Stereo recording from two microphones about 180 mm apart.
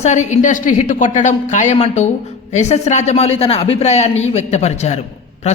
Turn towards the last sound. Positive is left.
turn(degrees=35)  # may be behind; listen again after turning